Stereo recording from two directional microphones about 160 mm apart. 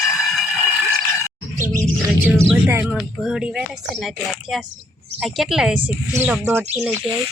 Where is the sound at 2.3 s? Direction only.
15° right (ahead or behind).